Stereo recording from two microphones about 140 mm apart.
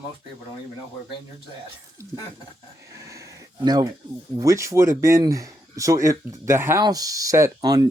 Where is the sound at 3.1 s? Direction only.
20° right (ahead or behind).